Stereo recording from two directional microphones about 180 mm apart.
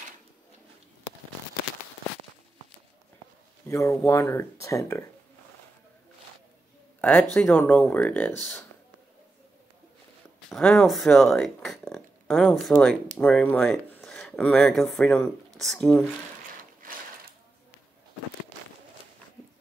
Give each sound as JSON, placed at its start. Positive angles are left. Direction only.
{"t": 3.6, "sound": "speech", "side_deg": 15}
{"t": 7.0, "sound": "a sound", "side_deg": 10}
{"t": 7.3, "sound": "speech", "side_deg": 10}
{"t": 10.5, "sound": "speech", "side_deg": 0}